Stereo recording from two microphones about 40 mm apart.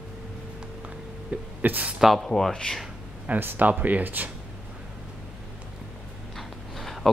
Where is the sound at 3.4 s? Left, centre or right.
Right.